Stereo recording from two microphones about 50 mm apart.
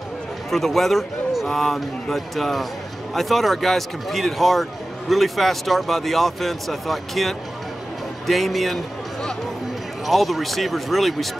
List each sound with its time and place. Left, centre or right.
0.5 s a man's voice: centre